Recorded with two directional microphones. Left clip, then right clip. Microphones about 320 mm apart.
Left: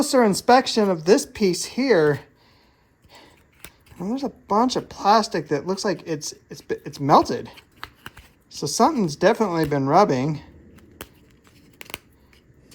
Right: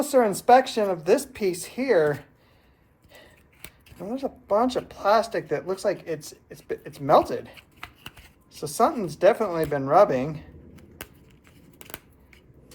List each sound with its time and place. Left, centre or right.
0.0 s speech: left
4.0 s speech: left
8.6 s speech: left
10.8 s a sound: centre